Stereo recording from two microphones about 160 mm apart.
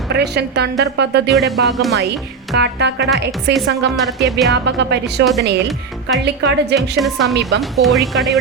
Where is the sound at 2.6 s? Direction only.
90° right.